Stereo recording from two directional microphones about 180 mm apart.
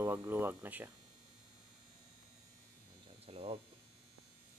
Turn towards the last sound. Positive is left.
turn(degrees=-35)  # may be behind; listen again after turning